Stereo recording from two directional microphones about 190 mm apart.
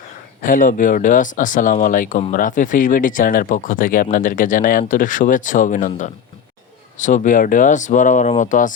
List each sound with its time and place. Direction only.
0.4 s speech: 45° left (ahead or behind)